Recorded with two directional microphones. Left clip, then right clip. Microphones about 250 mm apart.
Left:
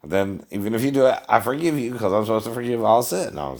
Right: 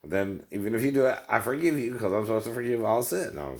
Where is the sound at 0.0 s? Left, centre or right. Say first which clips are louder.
Left 6 dB; left.